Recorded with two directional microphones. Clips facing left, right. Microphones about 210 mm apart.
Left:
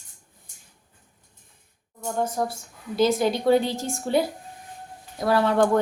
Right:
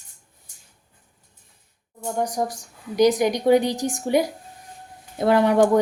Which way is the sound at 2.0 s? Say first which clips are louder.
Right 1 dB; 15° right (ahead or behind).